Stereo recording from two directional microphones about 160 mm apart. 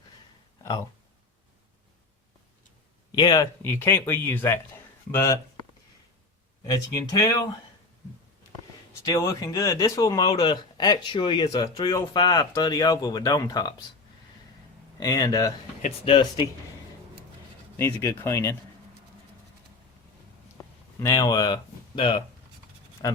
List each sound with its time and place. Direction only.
0.6 s speech: 20° left (ahead or behind)
3.1 s speech: 25° left (ahead or behind)
7.2 s speech: 20° left (ahead or behind)
9.0 s speech: 20° left (ahead or behind)
14.9 s speech: 25° left (ahead or behind)
16.0 s speech: 35° left (ahead or behind)
17.7 s speech: 15° left (ahead or behind)
21.0 s speech: 20° left (ahead or behind)